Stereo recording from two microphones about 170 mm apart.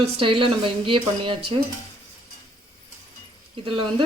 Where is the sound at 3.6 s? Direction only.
30° right (ahead or behind).